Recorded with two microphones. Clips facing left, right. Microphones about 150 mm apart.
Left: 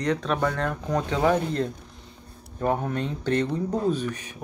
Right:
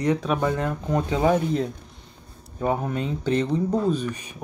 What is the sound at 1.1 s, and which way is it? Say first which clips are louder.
Speech: right 1 dB; 15° right (ahead or behind).